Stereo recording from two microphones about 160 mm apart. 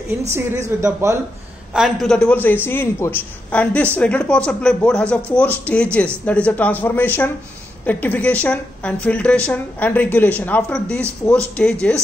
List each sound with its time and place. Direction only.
0.7 s a man's voice: 20° right (ahead or behind)
1.7 s a man's voice: centre (ahead or behind)